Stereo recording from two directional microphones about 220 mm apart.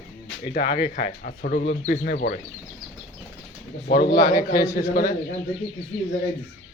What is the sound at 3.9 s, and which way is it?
A man's voice, 45° left (ahead or behind).